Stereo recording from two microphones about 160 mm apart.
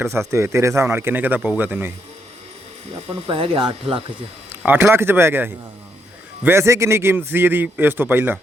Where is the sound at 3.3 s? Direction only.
35° right (ahead or behind).